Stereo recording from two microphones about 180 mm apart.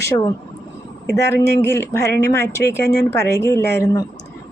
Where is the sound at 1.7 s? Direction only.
15° left (ahead or behind).